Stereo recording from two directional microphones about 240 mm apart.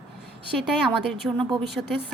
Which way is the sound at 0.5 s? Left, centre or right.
Centre.